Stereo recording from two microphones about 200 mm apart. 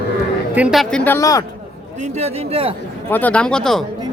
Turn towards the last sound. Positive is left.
turn(degrees=0)  # may be behind; listen again after turning